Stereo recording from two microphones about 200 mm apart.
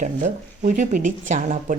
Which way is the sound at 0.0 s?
40° right (ahead or behind).